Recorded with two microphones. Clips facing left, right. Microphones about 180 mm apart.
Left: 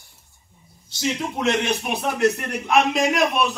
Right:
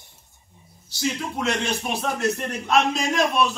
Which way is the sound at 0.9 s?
20° left (ahead or behind).